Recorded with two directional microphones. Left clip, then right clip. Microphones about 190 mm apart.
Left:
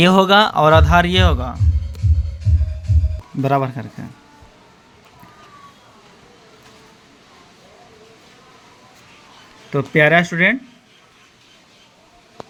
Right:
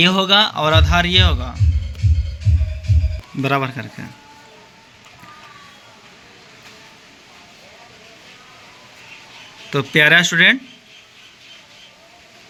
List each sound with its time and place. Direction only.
0.0 s speech: 65° left (ahead or behind)
3.4 s speech: 30° left (ahead or behind)
9.6 s speech: 10° left (ahead or behind)